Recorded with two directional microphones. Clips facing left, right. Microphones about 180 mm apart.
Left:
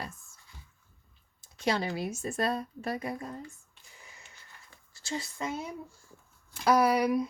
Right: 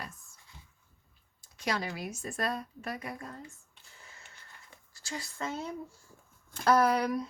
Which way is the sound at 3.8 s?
15° left (ahead or behind).